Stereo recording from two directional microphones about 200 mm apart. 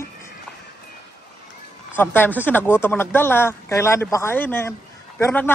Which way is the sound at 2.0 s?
10° left (ahead or behind).